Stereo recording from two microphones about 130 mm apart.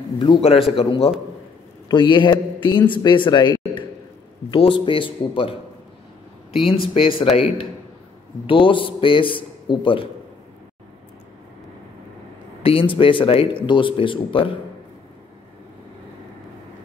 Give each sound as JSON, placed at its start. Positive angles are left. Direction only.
{"t": 0.4, "sound": "speech", "side_deg": 50}
{"t": 1.9, "sound": "a man's voice", "side_deg": 35}
{"t": 12.6, "sound": "speech", "side_deg": 45}